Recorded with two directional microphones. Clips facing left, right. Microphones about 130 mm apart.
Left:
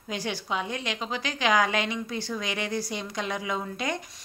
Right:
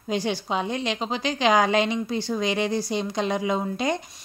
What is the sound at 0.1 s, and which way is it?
A woman's voice, 25° right (ahead or behind).